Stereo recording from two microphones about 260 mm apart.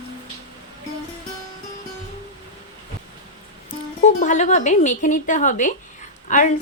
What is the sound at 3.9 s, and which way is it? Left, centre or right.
A woman's voice, left.